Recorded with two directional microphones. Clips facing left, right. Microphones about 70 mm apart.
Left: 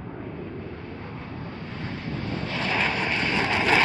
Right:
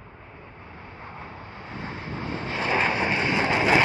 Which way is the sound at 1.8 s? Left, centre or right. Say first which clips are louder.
Left 1 dB; right.